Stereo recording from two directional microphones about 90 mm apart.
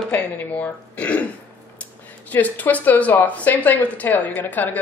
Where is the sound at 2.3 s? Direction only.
20° left (ahead or behind).